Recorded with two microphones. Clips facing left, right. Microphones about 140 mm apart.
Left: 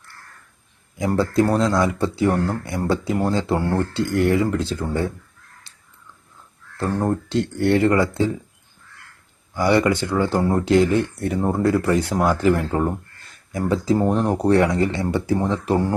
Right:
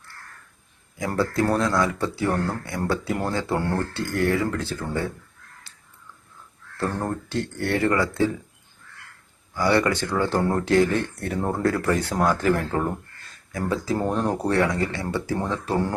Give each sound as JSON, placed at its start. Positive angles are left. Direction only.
{"t": 0.9, "sound": "speech", "side_deg": 20}
{"t": 6.7, "sound": "speech", "side_deg": 20}
{"t": 9.6, "sound": "speech", "side_deg": 15}